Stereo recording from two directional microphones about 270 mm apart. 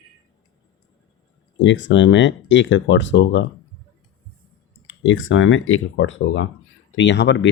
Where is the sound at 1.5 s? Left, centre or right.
Left.